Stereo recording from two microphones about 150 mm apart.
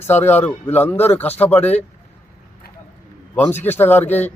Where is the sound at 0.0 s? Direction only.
15° left (ahead or behind).